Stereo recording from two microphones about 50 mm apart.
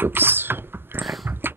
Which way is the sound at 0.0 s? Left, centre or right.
Right.